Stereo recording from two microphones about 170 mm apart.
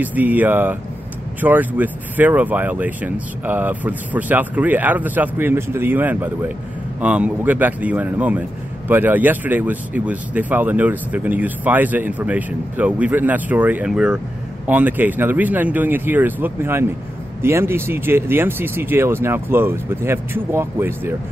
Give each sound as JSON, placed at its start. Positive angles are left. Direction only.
{"t": 0.0, "sound": "speech", "side_deg": -10}